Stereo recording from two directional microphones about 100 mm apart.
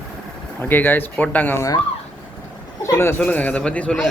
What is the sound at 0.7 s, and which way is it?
Speech, 20° left (ahead or behind).